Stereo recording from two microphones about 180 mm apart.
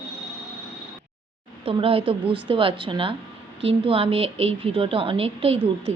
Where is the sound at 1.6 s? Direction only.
30° right (ahead or behind).